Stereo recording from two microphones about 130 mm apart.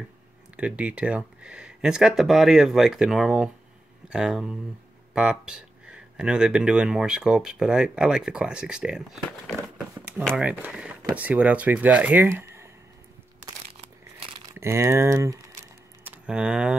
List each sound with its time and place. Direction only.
0.6 s speech: 10° right (ahead or behind)
14.6 s speech: 20° right (ahead or behind)
16.0 s a sound: 10° right (ahead or behind)